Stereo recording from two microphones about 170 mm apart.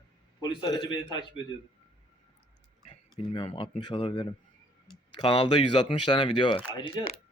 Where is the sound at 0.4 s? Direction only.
25° left (ahead or behind).